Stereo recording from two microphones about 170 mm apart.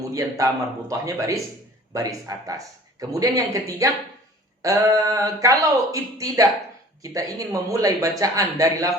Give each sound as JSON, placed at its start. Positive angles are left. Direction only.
{"t": 0.1, "sound": "speech", "side_deg": -20}